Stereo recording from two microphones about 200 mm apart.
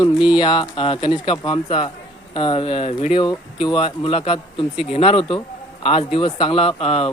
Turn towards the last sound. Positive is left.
turn(degrees=30)  # may be behind; listen again after turning